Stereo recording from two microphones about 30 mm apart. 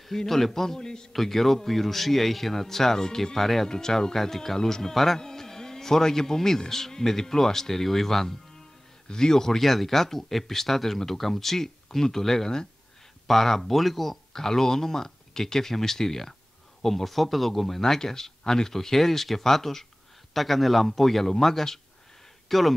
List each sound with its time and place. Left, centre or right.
0.3 s speech: centre
0.7 s a man's voice: left
1.1 s speech: centre
3.7 s a man's voice: left
9.0 s a man's voice: left
9.6 s a man's voice: centre
14.3 s speech: centre
16.8 s a man's voice: centre